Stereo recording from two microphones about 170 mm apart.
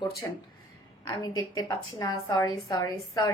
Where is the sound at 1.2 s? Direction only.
20° left (ahead or behind).